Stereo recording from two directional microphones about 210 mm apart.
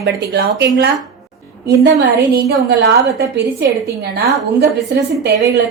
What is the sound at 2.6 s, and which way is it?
A woman's voice, 50° right (ahead or behind).